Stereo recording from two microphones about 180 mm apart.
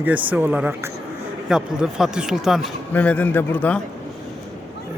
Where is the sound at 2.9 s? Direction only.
10° left (ahead or behind).